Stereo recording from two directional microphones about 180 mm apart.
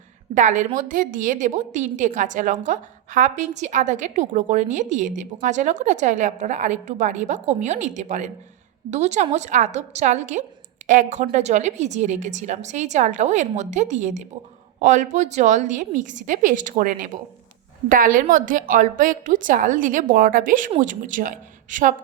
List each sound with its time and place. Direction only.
0.3 s a woman's voice: 45° right (ahead or behind)